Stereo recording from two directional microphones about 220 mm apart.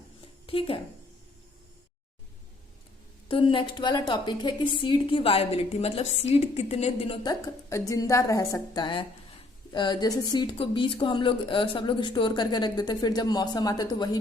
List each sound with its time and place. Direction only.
0.4 s a woman's voice: 25° left (ahead or behind)
3.2 s a woman's voice: 25° left (ahead or behind)